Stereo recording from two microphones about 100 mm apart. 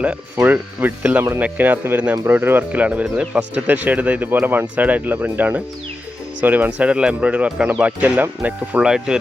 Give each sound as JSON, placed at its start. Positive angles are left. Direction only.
{"t": 0.3, "sound": "speech", "side_deg": -20}